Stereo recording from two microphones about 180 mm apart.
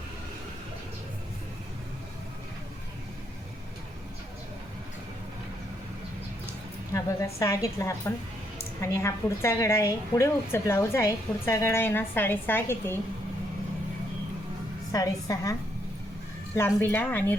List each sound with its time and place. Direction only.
6.9 s a woman's voice: 15° left (ahead or behind)
14.9 s a woman's voice: 20° left (ahead or behind)
16.6 s a woman's voice: 15° left (ahead or behind)